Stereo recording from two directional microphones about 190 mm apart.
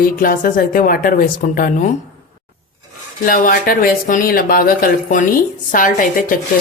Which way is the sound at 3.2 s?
45° left (ahead or behind).